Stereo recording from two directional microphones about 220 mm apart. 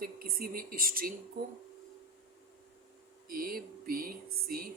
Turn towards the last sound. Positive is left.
turn(degrees=-40)  # may be behind; listen again after turning